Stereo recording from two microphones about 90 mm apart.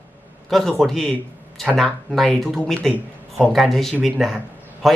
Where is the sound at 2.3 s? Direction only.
5° left (ahead or behind).